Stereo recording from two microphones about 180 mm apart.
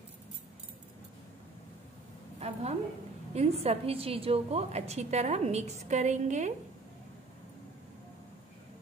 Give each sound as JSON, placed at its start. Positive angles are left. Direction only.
{"t": 2.4, "sound": "a woman's voice", "side_deg": -35}